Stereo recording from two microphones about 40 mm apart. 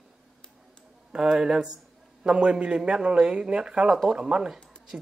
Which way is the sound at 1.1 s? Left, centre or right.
Right.